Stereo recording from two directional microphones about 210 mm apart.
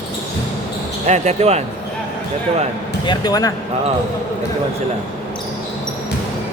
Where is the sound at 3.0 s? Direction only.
20° left (ahead or behind).